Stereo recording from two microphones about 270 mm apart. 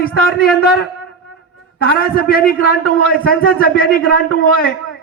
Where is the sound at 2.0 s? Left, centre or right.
Left.